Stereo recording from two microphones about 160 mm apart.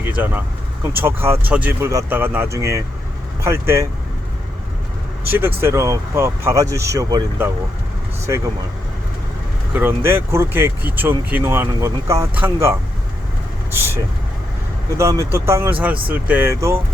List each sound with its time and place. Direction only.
0.0 s speech: 10° right (ahead or behind)
5.3 s speech: 15° right (ahead or behind)
9.7 s speech: 15° right (ahead or behind)
14.9 s speech: 20° right (ahead or behind)